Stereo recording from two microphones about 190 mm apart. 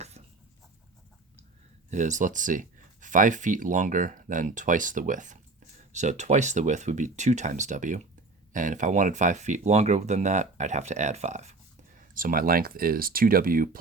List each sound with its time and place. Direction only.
1.9 s speech: 40° right (ahead or behind)